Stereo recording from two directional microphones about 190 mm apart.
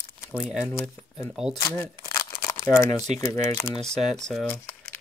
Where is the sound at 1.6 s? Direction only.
15° left (ahead or behind).